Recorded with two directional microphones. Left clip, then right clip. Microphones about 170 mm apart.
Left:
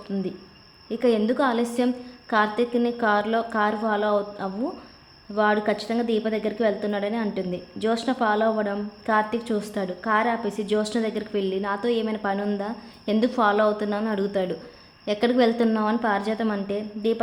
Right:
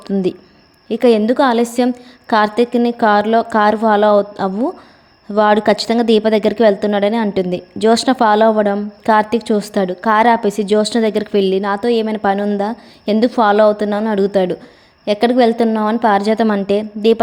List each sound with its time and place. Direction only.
0.9 s a woman's voice: 45° right (ahead or behind)